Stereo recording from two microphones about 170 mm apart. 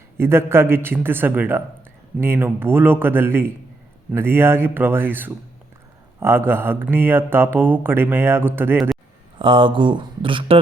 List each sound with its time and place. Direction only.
0.2 s speech: 15° right (ahead or behind)
9.4 s speech: 30° right (ahead or behind)